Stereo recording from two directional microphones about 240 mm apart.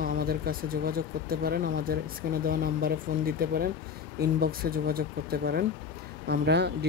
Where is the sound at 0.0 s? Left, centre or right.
Right.